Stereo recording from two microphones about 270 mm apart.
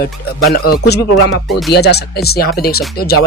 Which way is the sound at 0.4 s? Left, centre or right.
Left.